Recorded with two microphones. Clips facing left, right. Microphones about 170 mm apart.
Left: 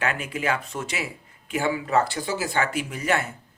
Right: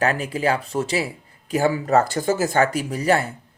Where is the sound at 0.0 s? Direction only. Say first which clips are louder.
Right 6 dB; 35° right (ahead or behind).